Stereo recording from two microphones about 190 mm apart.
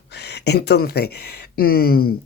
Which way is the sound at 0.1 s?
60° left (ahead or behind).